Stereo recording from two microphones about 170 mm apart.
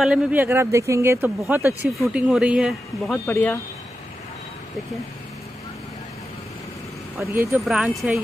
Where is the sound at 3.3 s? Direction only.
5° left (ahead or behind).